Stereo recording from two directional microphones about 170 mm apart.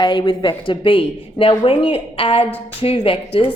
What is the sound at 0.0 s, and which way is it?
A woman's voice, 25° left (ahead or behind).